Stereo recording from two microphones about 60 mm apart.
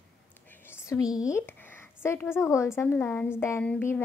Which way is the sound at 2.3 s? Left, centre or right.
Left.